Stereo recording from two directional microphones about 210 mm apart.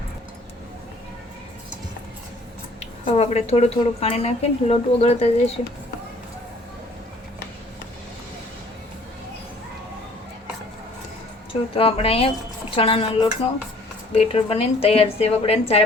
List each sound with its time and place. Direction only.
3.0 s a woman's voice: 30° left (ahead or behind)
11.8 s a woman's voice: 30° left (ahead or behind)